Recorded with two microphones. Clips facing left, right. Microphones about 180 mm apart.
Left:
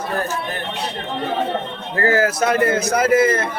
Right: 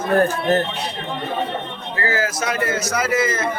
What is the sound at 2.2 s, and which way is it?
A man's voice, 55° left (ahead or behind).